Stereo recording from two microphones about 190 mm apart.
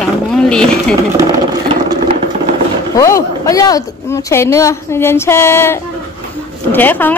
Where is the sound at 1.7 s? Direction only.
25° right (ahead or behind).